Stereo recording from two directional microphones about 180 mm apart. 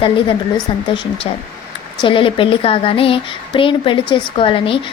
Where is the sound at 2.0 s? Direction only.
30° left (ahead or behind).